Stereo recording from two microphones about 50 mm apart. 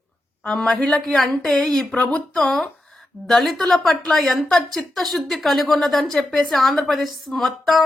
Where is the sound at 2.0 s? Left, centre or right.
Left.